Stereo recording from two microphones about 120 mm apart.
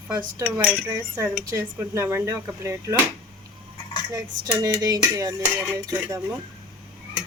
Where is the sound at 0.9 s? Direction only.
20° right (ahead or behind).